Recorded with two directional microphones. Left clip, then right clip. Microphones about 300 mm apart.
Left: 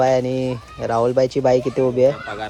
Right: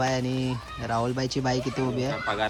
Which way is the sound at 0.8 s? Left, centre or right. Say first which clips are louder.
Left 9 dB; left.